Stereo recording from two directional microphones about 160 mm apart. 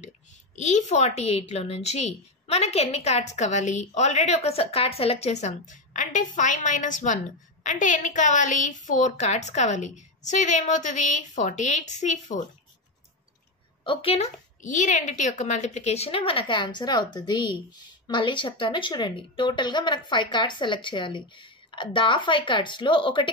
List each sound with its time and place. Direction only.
0.6 s a woman's voice: 45° left (ahead or behind)
13.8 s a woman's voice: 40° left (ahead or behind)